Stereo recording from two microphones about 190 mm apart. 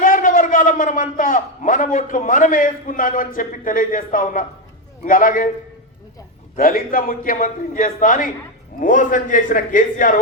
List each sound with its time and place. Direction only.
0.0 s a man's voice: 45° left (ahead or behind)
6.6 s a man's voice: 45° left (ahead or behind)